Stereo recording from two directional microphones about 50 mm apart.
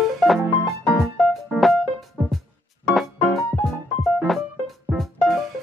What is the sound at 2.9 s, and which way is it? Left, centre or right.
Keyboard, centre.